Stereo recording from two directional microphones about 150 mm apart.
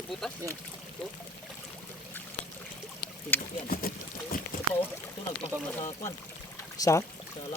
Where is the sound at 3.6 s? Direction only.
80° left.